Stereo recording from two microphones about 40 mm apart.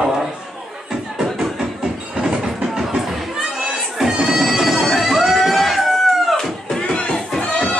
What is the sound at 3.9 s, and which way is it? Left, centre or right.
Bagpipes, centre.